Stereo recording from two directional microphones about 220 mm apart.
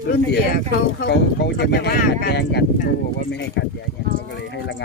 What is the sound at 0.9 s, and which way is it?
Speech, 50° left (ahead or behind).